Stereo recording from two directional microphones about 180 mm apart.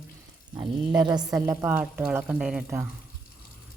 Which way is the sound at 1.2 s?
10° right (ahead or behind).